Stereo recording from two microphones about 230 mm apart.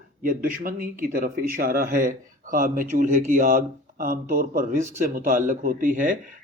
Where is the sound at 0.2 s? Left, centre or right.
Right.